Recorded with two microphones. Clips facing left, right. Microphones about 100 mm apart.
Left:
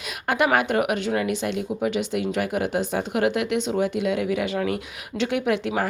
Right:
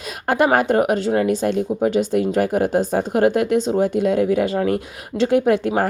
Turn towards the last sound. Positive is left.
turn(degrees=-40)  # may be behind; listen again after turning